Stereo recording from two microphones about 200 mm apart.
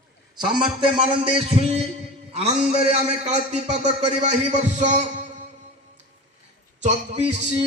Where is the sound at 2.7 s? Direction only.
30° right (ahead or behind).